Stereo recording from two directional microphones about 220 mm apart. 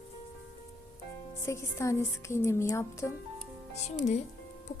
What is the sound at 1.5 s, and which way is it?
Speech, 10° left (ahead or behind).